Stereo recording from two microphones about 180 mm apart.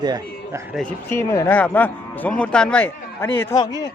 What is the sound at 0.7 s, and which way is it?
Speech, 10° left (ahead or behind).